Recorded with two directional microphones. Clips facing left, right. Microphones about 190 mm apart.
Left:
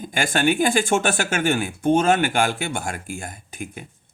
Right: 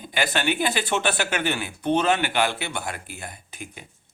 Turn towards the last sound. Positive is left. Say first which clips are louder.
# left 6 dB
turn(degrees=50)  # may be behind; listen again after turning